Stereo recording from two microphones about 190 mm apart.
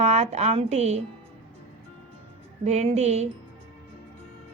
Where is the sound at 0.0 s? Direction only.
35° right (ahead or behind).